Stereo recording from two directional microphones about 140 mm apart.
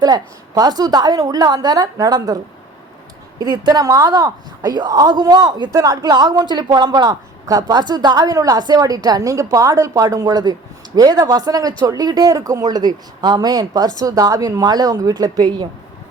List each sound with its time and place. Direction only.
0.0 s a man's voice: 30° right (ahead or behind)